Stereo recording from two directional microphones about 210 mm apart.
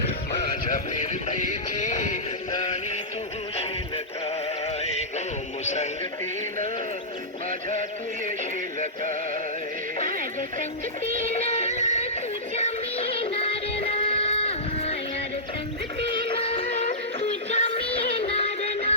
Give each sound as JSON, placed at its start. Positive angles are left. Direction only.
{"t": 0.6, "sound": "music", "side_deg": 35}
{"t": 5.6, "sound": "speech", "side_deg": 35}
{"t": 11.0, "sound": "music", "side_deg": 30}
{"t": 16.2, "sound": "music", "side_deg": 25}